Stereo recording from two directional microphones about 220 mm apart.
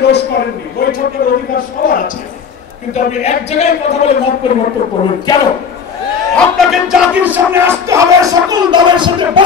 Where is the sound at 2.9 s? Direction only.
30° left (ahead or behind).